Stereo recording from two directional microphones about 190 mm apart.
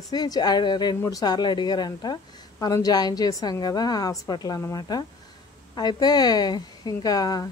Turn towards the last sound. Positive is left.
turn(degrees=20)  # may be behind; listen again after turning